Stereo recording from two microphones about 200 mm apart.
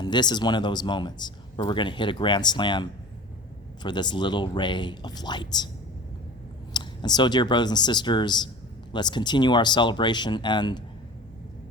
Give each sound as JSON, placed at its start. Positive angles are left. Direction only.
{"t": 0.0, "sound": "speech", "side_deg": 20}
{"t": 3.8, "sound": "speech", "side_deg": 20}
{"t": 6.7, "sound": "speech", "side_deg": 20}